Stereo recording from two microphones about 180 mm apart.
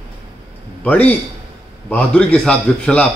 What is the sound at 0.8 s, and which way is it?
Speech, 10° left (ahead or behind).